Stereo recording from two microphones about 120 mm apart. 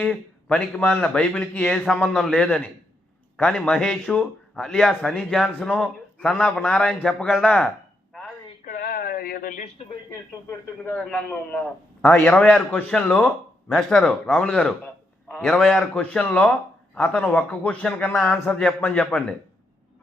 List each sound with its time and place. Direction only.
0.0 s a man's voice: 10° left (ahead or behind); by 7.7 s 5° right (ahead or behind)
9.8 s speech: 55° left (ahead or behind)
10.8 s a man's voice: 15° left (ahead or behind)